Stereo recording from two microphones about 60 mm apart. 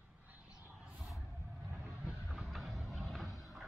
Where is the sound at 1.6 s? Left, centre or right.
Right.